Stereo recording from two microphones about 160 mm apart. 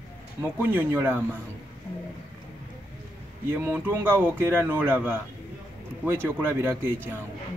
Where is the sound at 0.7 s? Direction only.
15° right (ahead or behind).